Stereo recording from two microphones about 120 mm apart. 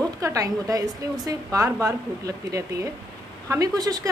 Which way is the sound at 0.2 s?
25° right (ahead or behind).